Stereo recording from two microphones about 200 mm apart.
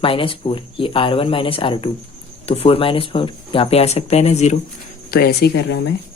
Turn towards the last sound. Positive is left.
turn(degrees=55)  # may be behind; listen again after turning